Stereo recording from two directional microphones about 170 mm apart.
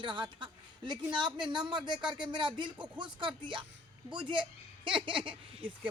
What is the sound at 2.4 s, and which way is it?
Speech, 25° right (ahead or behind).